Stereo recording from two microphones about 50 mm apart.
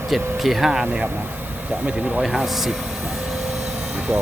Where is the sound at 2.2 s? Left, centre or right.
Centre.